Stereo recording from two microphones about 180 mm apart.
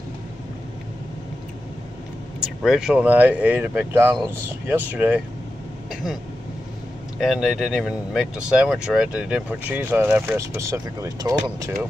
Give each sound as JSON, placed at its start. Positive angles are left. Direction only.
{"t": 2.4, "sound": "speech", "side_deg": 0}
{"t": 7.2, "sound": "speech", "side_deg": 0}